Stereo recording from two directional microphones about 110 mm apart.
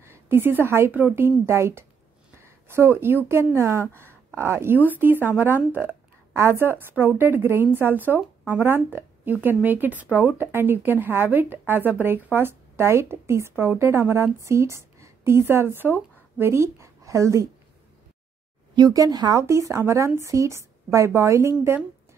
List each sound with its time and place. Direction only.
0.0 s a woman's voice: 20° right (ahead or behind)
18.8 s speech: 35° right (ahead or behind)
19.4 s speech: 25° right (ahead or behind)